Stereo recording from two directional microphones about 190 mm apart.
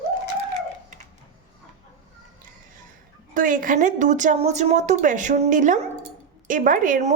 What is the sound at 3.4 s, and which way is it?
A woman's voice, 45° right (ahead or behind).